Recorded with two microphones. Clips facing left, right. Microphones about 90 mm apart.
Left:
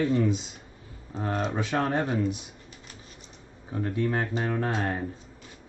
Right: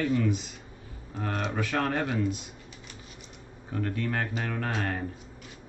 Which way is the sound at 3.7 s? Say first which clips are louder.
Left 3 dB; 20° left (ahead or behind).